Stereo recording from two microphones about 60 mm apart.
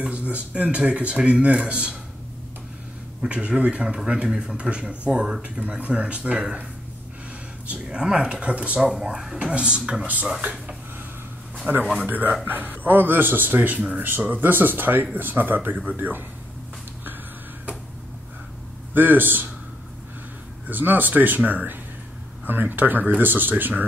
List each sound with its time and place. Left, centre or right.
0.0 s speech: right
3.2 s a man's voice: centre
7.6 s a man's voice: centre
8.9 s a man's voice: centre
11.8 s a man's voice: centre
12.1 s speech: right
18.9 s speech: right
20.6 s speech: right